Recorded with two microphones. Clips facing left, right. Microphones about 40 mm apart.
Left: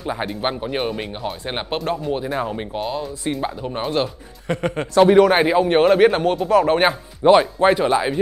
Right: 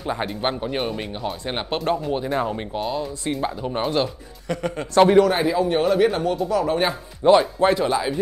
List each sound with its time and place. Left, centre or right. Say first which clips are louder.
0.0 s speech: left 1 dB; centre
4.5 s speech: left 3 dB; left
5.3 s speech: left 4 dB; left
7.2 s speech: left 2 dB; left